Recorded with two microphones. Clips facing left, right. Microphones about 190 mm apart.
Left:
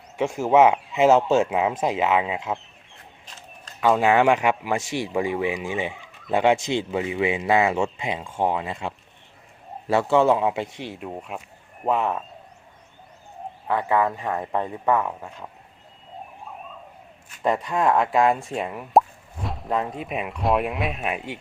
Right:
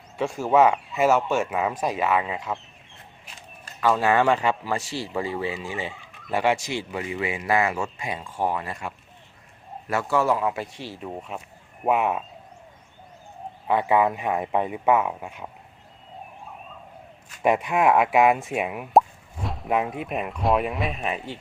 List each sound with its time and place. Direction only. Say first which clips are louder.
0.2 s speech: left 2 dB; 20° left (ahead or behind)
3.8 s speech: left 2 dB; 15° left (ahead or behind)
9.9 s speech: left 4 dB; 25° left (ahead or behind)
11.0 s speech: right 2 dB; 5° left (ahead or behind)
11.9 s speech: right 1 dB; 10° right (ahead or behind)
13.7 s speech: right 1 dB; 15° right (ahead or behind)
17.4 s speech: right 2 dB; 10° right (ahead or behind); by 21.2 s 5° left (ahead or behind)